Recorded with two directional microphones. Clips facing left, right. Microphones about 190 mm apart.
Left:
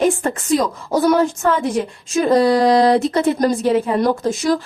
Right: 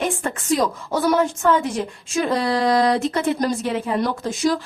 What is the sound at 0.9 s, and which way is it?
Speech, 40° left (ahead or behind).